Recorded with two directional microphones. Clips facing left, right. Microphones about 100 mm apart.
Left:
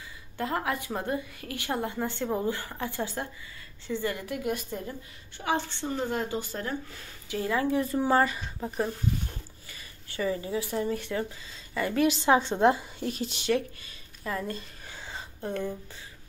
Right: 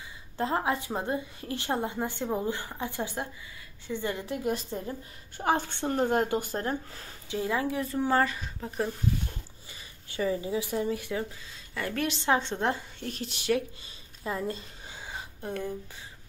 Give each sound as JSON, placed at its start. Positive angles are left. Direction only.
{"t": 0.4, "sound": "a woman's voice", "side_deg": -25}
{"t": 5.4, "sound": "a woman's voice", "side_deg": -45}
{"t": 6.5, "sound": "speech", "side_deg": -35}
{"t": 7.3, "sound": "a woman's voice", "side_deg": -10}
{"t": 9.7, "sound": "a sound", "side_deg": -15}
{"t": 10.2, "sound": "speech", "side_deg": -10}
{"t": 11.7, "sound": "a woman's voice", "side_deg": 5}
{"t": 14.2, "sound": "a sound", "side_deg": -25}